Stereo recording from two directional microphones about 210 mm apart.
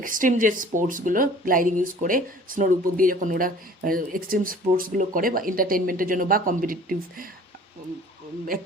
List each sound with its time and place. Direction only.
0.0 s speech: 40° right (ahead or behind)